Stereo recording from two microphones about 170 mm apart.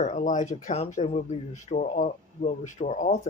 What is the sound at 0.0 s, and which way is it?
Speech, 45° left (ahead or behind).